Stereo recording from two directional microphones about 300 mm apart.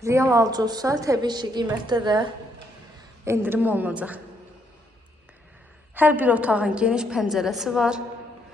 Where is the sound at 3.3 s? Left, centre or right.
Centre.